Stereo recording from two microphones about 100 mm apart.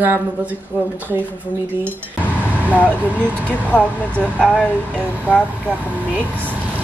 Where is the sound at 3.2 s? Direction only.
15° left (ahead or behind).